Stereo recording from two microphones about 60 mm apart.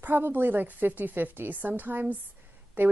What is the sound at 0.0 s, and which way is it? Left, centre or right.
A woman's voice, right.